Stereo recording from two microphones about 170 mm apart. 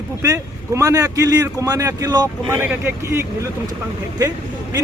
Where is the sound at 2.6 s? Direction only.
10° right (ahead or behind).